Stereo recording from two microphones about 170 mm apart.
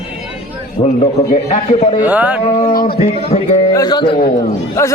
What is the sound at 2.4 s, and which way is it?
Speech, 30° left (ahead or behind).